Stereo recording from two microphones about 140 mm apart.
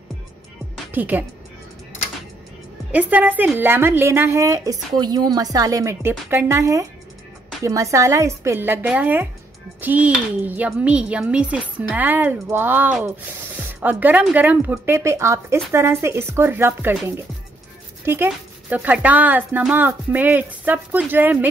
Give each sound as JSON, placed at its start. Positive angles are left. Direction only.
{"t": 0.9, "sound": "speech", "side_deg": -15}
{"t": 2.9, "sound": "speech", "side_deg": -10}
{"t": 18.0, "sound": "speech", "side_deg": -15}